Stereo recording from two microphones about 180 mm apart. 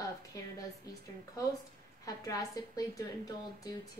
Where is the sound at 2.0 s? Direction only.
20° left (ahead or behind).